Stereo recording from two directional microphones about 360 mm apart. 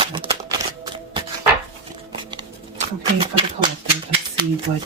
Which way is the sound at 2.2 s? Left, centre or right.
Centre.